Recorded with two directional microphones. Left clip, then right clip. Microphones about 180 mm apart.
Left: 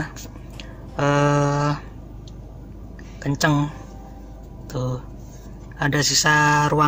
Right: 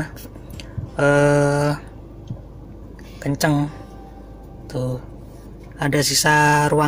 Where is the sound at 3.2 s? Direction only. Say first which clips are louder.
Right 1 dB; centre (ahead or behind).